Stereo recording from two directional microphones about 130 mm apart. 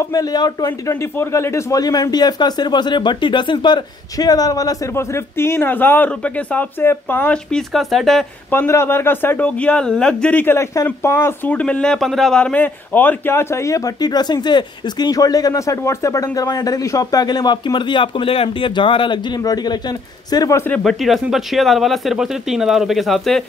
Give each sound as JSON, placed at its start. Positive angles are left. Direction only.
{"t": 0.1, "sound": "a man's voice", "side_deg": 30}
{"t": 7.7, "sound": "speech", "side_deg": 0}
{"t": 8.5, "sound": "a man's voice", "side_deg": 20}
{"t": 20.2, "sound": "a man's voice", "side_deg": 30}
{"t": 20.7, "sound": "speech", "side_deg": 0}